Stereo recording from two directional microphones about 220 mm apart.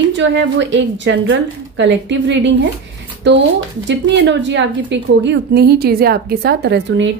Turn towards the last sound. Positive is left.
turn(degrees=-55)  # may be behind; listen again after turning